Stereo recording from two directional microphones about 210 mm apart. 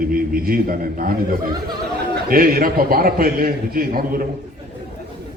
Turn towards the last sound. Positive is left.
turn(degrees=-45)  # may be behind; listen again after turning